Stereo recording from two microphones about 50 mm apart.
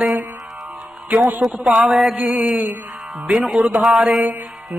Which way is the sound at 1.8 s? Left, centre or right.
Right.